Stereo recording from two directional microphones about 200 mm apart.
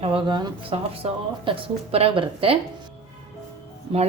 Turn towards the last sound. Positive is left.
turn(degrees=-25)  # may be behind; listen again after turning